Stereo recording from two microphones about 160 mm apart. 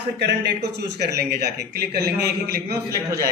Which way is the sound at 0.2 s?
90° right.